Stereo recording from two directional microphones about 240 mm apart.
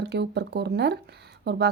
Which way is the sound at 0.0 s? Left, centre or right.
Right.